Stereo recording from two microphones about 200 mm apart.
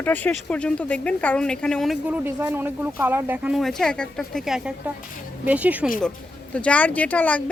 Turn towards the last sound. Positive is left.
turn(degrees=10)  # may be behind; listen again after turning